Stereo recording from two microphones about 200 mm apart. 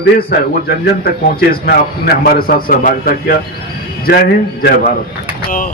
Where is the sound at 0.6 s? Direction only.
50° left (ahead or behind).